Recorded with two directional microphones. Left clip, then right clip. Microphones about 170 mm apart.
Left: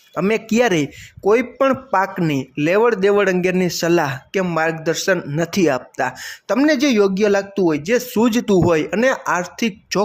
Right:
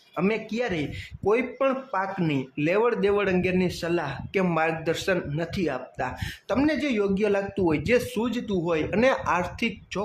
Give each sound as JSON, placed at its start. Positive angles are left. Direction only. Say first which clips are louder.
{"t": 0.1, "sound": "speech", "louder": "left 8 dB", "side_deg": 30}
{"t": 4.5, "sound": "speech", "louder": "left 8 dB", "side_deg": 25}
{"t": 5.5, "sound": "speech", "louder": "left 11 dB", "side_deg": 40}
{"t": 6.2, "sound": "speech", "louder": "left 5 dB", "side_deg": 25}
{"t": 6.7, "sound": "speech", "louder": "left 13 dB", "side_deg": 40}
{"t": 8.1, "sound": "speech", "louder": "left 12 dB", "side_deg": 45}
{"t": 8.7, "sound": "speech", "louder": "left 6 dB", "side_deg": 30}